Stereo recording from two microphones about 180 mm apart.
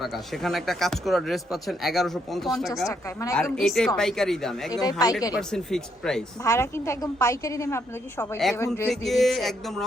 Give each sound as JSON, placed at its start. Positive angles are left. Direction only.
{"t": 0.0, "sound": "speech", "side_deg": 0}
{"t": 2.8, "sound": "a woman's voice", "side_deg": 15}
{"t": 3.6, "sound": "speech", "side_deg": 0}
{"t": 4.7, "sound": "speech", "side_deg": 20}
{"t": 5.3, "sound": "speech", "side_deg": 5}
{"t": 6.4, "sound": "a woman's voice", "side_deg": 15}
{"t": 8.9, "sound": "speech", "side_deg": 0}